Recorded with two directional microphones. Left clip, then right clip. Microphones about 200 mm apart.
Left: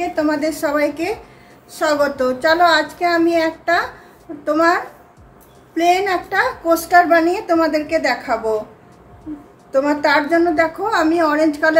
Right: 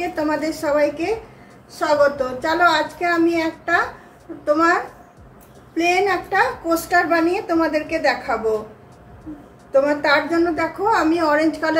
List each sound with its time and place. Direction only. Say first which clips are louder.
0.0 s a woman's voice: left 3 dB; 35° left (ahead or behind)
5.8 s a woman's voice: left 2 dB; 40° left (ahead or behind)
9.7 s a woman's voice: left 1 dB; 40° left (ahead or behind)